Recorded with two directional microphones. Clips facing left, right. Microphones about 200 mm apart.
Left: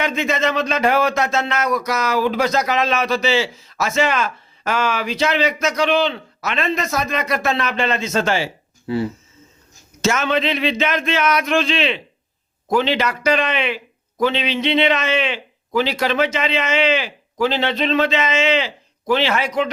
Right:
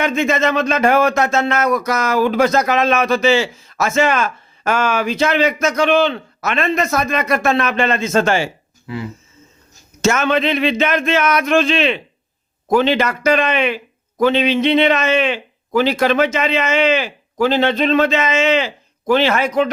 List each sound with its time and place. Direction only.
0.0 s speech: 50° right (ahead or behind)
8.9 s speech: 30° left (ahead or behind)
10.0 s speech: 50° right (ahead or behind)